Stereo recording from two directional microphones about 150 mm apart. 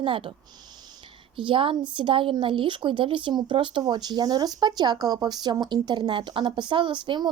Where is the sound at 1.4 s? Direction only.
35° right (ahead or behind).